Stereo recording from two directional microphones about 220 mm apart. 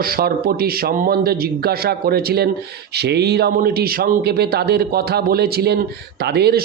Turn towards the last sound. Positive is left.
turn(degrees=-50)  # may be behind; listen again after turning